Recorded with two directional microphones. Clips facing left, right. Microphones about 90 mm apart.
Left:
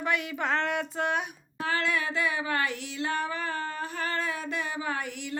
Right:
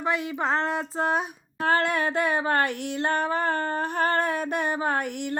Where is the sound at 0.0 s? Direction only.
25° right (ahead or behind).